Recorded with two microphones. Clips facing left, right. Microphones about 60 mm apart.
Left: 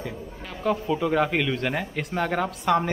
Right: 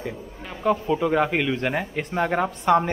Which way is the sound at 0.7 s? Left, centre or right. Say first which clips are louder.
Right 3 dB; centre.